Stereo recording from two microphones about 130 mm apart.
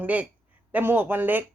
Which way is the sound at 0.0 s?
10° right (ahead or behind).